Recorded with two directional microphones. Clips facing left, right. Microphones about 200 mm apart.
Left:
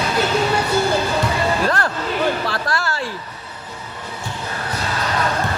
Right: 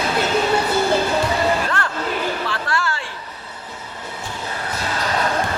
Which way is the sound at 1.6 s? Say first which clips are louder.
Left 3 dB; 40° left (ahead or behind).